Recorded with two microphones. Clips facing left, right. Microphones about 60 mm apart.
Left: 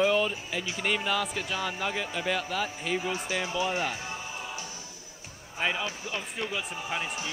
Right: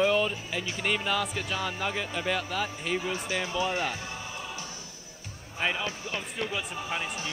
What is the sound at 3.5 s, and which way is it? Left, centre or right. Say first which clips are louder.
Speech: even; centre.